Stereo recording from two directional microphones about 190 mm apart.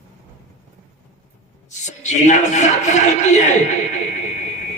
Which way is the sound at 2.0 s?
40° left (ahead or behind).